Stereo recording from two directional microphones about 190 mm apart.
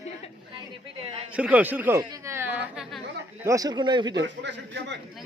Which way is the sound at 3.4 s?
15° right (ahead or behind).